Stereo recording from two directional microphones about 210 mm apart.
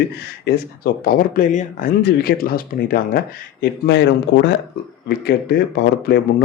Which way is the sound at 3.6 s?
55° left (ahead or behind).